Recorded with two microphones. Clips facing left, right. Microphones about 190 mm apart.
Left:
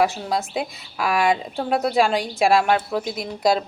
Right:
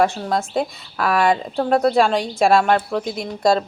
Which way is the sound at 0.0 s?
Centre (ahead or behind).